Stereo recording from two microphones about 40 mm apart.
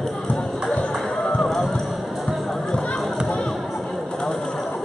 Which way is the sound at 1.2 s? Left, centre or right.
Centre.